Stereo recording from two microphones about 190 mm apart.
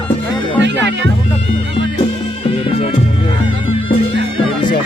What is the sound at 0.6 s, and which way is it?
Music, 70° right (ahead or behind).